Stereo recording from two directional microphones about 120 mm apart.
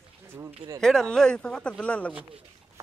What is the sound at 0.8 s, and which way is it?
Speech, 5° left (ahead or behind).